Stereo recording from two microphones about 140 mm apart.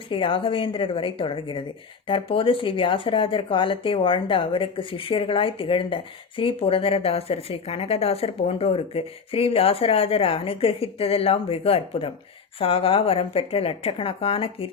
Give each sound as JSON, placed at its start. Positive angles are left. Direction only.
{"t": 0.1, "sound": "speech", "side_deg": 40}